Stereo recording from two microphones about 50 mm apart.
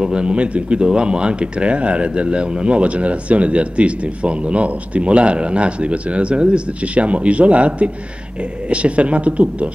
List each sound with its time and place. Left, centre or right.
0.0 s speech: centre